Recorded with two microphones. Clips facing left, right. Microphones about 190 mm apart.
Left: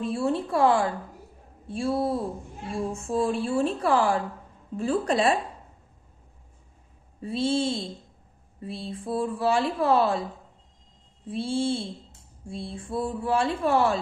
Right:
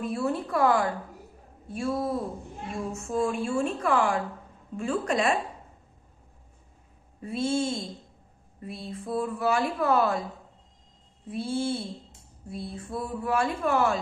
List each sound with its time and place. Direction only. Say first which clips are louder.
0.0 s a woman's voice: left 2 dB; 30° left (ahead or behind)
7.2 s a woman's voice: left 2 dB; 30° left (ahead or behind)
11.2 s speech: left 2 dB; 30° left (ahead or behind)